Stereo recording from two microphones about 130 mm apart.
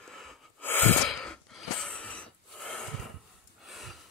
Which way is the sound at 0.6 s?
15° left (ahead or behind).